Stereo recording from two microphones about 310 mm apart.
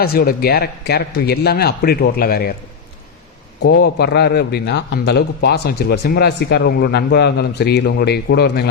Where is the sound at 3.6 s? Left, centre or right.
Left.